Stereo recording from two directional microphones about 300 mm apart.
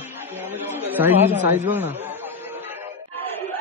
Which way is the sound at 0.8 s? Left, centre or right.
Centre.